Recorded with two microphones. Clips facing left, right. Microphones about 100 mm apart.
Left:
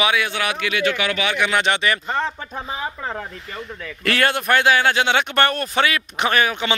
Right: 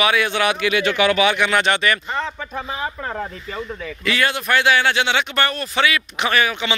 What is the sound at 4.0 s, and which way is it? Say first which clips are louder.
Speech: left 2 dB; 55° left (ahead or behind).